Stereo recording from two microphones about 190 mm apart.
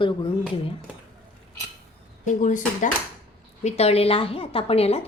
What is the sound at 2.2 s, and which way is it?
Speech, 40° left (ahead or behind).